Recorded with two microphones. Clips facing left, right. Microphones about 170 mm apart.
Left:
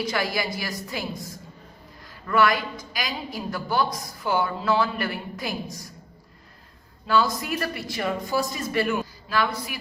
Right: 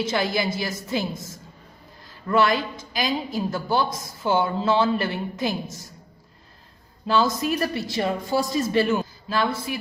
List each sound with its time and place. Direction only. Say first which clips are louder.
0.0 s a woman's voice: right 3 dB; 25° right (ahead or behind)
7.1 s a woman's voice: right 2 dB; 25° right (ahead or behind)